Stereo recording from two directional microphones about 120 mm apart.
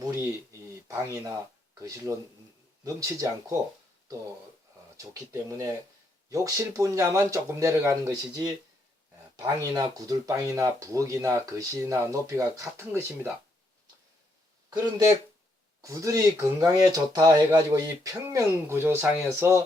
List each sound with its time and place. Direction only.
0.0 s speech: 25° right (ahead or behind)
4.9 s speech: 25° right (ahead or behind)
9.7 s speech: 30° right (ahead or behind)
14.7 s speech: 30° right (ahead or behind)